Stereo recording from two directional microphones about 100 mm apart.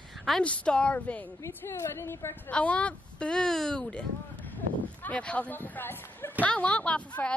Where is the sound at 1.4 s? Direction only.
30° left (ahead or behind).